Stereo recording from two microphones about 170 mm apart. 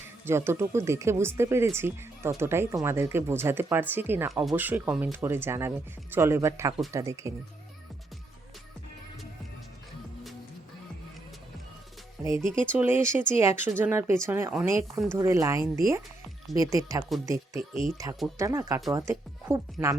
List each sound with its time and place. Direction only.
0.3 s speech: 15° right (ahead or behind)
12.3 s speech: 50° right (ahead or behind)
12.7 s speech: 10° right (ahead or behind)